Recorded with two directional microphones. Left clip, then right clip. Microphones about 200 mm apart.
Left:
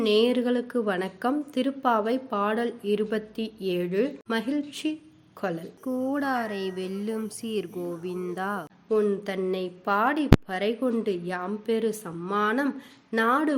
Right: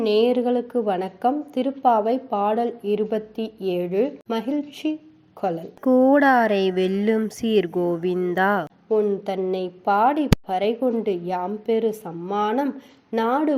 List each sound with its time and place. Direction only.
0.0 s a woman's voice: centre (ahead or behind)
5.8 s speech: 35° right (ahead or behind)
8.9 s a woman's voice: centre (ahead or behind)